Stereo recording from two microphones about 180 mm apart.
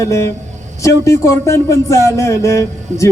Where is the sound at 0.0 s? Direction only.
15° left (ahead or behind).